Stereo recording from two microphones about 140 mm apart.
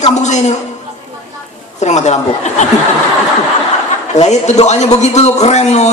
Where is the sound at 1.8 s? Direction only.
55° left (ahead or behind).